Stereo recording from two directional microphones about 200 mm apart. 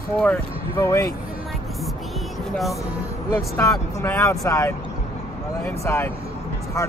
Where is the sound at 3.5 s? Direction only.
15° left (ahead or behind).